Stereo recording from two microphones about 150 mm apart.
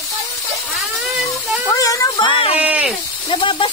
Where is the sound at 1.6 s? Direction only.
20° left (ahead or behind).